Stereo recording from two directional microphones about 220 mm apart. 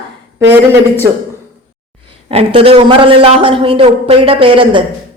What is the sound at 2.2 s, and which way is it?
Speech, 25° right (ahead or behind).